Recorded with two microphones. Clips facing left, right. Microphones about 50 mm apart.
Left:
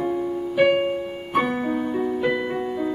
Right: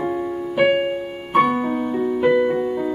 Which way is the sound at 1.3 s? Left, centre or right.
Centre.